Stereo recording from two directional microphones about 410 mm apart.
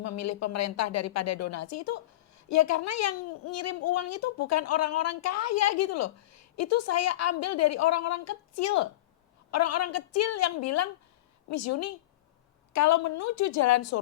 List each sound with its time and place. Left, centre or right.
0.0 s a woman's voice: left